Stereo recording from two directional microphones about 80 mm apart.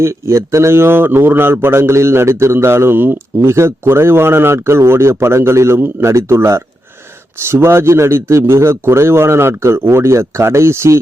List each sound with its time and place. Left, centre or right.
0.0 s a man's voice: right